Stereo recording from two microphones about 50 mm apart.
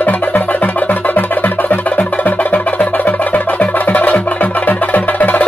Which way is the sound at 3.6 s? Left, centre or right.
Left.